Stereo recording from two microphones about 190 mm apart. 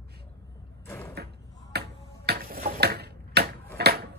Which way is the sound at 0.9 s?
10° left (ahead or behind).